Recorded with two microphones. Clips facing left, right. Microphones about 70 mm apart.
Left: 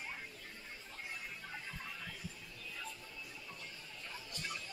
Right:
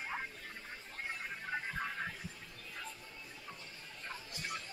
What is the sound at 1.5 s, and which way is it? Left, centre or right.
Music, right.